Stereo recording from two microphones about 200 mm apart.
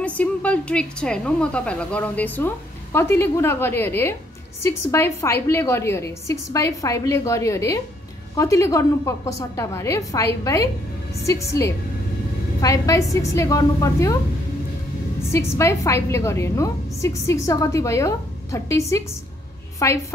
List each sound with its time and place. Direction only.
0.0 s a woman's voice: 5° left (ahead or behind)
15.3 s a woman's voice: 15° left (ahead or behind)